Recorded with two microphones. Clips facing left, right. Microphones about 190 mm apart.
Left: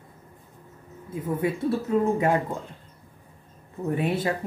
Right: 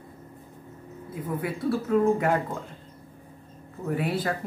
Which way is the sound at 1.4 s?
20° left (ahead or behind).